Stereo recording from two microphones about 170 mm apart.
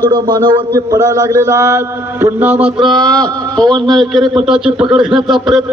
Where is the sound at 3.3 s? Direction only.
25° right (ahead or behind).